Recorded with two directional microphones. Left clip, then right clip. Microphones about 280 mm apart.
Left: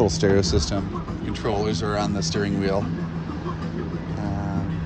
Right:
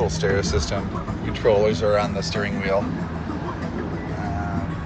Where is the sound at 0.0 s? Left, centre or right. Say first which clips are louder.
Left 2 dB; left.